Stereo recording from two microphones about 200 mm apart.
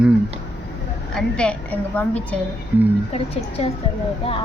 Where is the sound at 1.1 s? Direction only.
5° left (ahead or behind).